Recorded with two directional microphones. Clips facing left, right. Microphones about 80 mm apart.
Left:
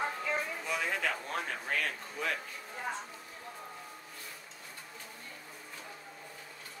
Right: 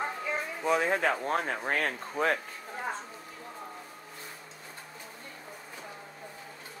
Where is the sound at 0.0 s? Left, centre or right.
Centre.